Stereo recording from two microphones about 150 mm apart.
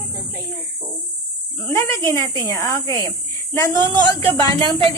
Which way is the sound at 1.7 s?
15° left (ahead or behind).